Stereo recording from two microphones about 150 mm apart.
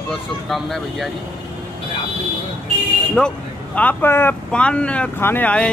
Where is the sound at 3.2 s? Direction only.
5° left (ahead or behind).